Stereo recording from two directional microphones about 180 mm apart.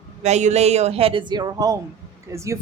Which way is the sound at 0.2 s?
40° right (ahead or behind).